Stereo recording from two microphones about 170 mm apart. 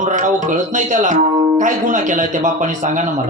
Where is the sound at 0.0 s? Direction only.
45° right (ahead or behind).